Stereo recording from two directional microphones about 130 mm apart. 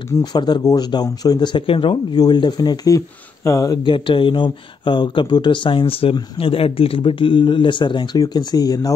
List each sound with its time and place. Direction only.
0.2 s speech: 35° left (ahead or behind)